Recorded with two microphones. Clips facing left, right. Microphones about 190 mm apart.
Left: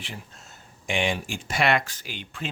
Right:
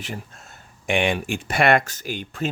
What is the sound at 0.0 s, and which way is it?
Speech, 50° right (ahead or behind).